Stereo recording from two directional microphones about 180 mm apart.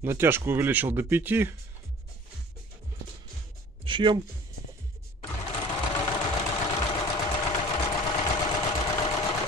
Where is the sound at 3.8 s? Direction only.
25° right (ahead or behind).